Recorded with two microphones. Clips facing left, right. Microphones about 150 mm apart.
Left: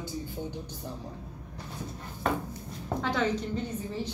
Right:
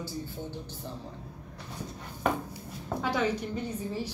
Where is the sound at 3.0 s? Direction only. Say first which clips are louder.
Even; 10° right (ahead or behind).